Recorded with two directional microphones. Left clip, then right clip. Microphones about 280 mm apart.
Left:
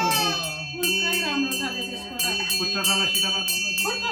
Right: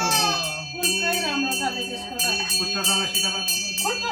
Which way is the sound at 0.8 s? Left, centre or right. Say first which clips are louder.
Even; centre.